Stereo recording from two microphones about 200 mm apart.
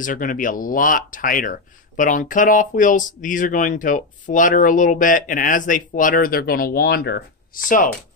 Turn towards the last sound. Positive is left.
turn(degrees=40)  # may be behind; listen again after turning